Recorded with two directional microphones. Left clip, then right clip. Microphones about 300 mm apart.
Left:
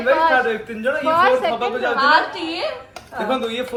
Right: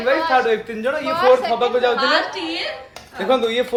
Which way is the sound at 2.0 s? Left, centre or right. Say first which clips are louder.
Left 3 dB; centre.